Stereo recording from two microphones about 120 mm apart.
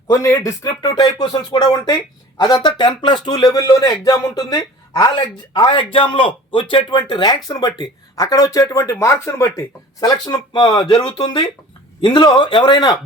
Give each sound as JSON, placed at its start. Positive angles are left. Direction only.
{"t": 0.1, "sound": "speech", "side_deg": 25}